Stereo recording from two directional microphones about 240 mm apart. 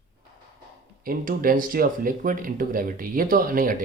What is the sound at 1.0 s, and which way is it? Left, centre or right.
Speech, right.